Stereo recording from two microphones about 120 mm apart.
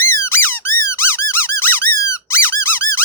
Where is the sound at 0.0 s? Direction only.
20° left (ahead or behind).